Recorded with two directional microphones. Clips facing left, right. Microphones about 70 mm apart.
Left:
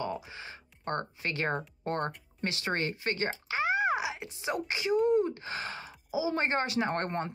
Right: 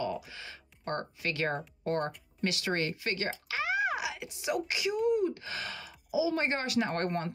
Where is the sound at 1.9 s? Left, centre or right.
Left.